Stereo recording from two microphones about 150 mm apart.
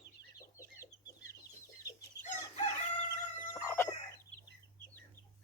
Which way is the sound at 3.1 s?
20° left (ahead or behind).